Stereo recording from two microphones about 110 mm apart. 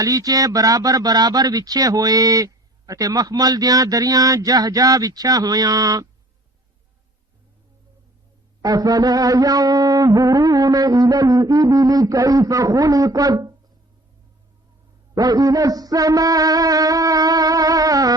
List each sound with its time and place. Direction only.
0.0 s speech: 35° right (ahead or behind)
8.6 s speech: 35° right (ahead or behind)
15.1 s music: 35° right (ahead or behind)